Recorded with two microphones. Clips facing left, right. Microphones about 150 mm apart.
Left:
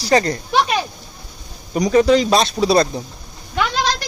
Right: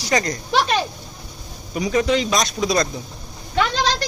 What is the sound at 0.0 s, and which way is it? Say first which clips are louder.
Speech: left 5 dB; 30° left (ahead or behind).